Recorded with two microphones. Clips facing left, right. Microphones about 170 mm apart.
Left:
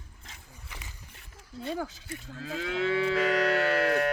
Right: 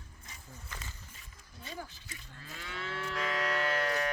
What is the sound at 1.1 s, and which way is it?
Cattle, 65° left (ahead or behind).